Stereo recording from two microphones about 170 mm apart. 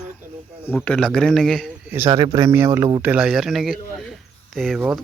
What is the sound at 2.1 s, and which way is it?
Speech, 25° right (ahead or behind).